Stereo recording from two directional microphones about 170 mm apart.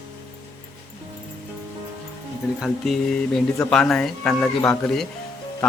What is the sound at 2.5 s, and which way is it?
Speech, centre (ahead or behind).